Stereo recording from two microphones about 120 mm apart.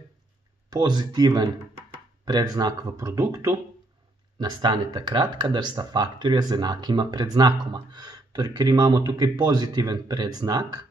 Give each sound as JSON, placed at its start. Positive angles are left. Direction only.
{"t": 0.7, "sound": "speech", "side_deg": -35}
{"t": 4.4, "sound": "speech", "side_deg": -40}